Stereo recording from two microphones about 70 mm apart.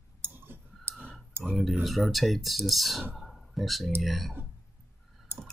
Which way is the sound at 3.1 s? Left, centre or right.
Centre.